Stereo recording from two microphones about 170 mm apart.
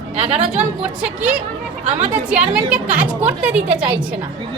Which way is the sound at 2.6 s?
10° right (ahead or behind).